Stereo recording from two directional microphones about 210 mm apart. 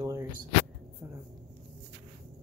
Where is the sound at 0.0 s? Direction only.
15° right (ahead or behind).